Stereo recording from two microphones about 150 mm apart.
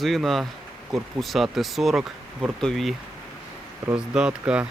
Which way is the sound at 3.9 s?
5° right (ahead or behind).